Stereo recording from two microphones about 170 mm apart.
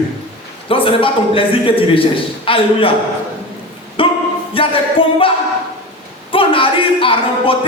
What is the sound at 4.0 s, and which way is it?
Music, 30° left (ahead or behind).